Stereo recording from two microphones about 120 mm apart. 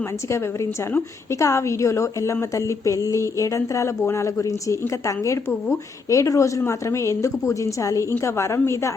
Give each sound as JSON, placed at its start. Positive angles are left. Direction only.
{"t": 0.3, "sound": "a woman's voice", "side_deg": 25}